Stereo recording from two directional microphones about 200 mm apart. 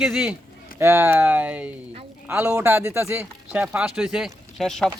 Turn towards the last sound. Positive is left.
turn(degrees=0)  # may be behind; listen again after turning